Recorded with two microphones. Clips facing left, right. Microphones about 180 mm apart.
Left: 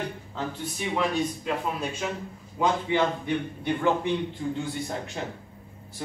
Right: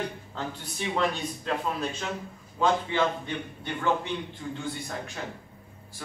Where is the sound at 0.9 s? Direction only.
10° left (ahead or behind).